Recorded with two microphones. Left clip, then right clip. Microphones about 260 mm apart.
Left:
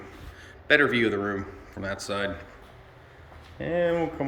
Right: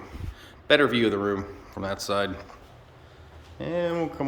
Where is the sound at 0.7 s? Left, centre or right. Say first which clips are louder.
Right 1 dB; centre.